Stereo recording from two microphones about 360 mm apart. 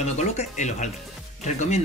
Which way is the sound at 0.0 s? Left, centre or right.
Centre.